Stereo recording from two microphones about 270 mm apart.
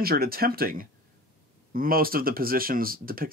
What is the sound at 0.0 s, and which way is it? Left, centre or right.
Speech, right.